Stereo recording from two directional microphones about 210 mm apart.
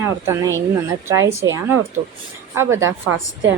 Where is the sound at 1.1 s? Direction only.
15° right (ahead or behind).